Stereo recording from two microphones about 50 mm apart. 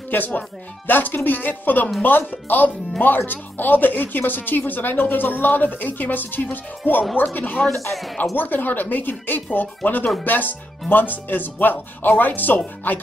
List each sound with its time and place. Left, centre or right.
0.1 s a woman's voice: left